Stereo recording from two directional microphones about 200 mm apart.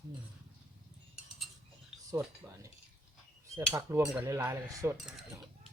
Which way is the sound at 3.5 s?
15° right (ahead or behind).